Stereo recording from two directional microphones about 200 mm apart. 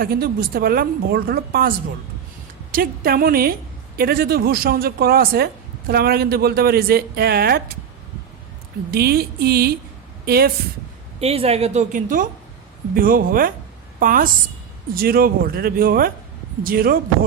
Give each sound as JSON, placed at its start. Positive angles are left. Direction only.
{"t": 0.0, "sound": "a woman's voice", "side_deg": -50}
{"t": 2.7, "sound": "a woman's voice", "side_deg": -45}
{"t": 8.9, "sound": "a woman's voice", "side_deg": -50}
{"t": 11.2, "sound": "a woman's voice", "side_deg": -30}